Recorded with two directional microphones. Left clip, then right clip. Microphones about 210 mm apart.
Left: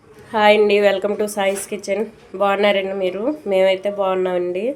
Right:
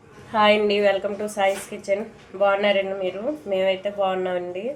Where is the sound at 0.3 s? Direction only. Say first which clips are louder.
Left 5 dB; 30° left (ahead or behind).